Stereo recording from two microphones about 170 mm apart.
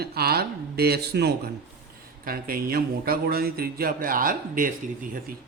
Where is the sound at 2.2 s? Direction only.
60° right (ahead or behind).